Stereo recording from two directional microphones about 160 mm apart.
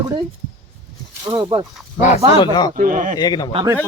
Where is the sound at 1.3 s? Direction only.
25° right (ahead or behind).